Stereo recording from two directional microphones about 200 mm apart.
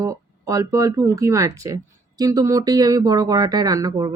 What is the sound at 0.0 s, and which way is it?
Speech, 15° right (ahead or behind).